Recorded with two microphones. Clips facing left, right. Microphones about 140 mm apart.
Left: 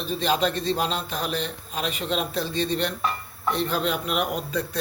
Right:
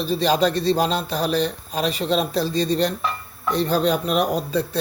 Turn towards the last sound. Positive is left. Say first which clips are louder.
# right 5 dB
turn(degrees=-35)  # may be behind; listen again after turning